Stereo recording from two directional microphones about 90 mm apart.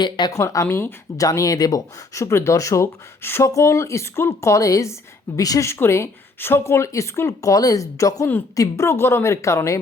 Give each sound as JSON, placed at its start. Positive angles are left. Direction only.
{"t": 0.0, "sound": "a woman's voice", "side_deg": 55}
{"t": 0.3, "sound": "speech", "side_deg": 35}